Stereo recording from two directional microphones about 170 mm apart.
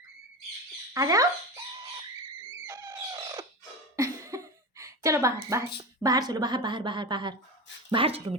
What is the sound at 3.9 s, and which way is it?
Speech, 15° right (ahead or behind).